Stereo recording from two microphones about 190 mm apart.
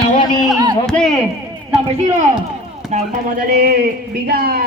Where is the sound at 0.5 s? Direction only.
20° right (ahead or behind).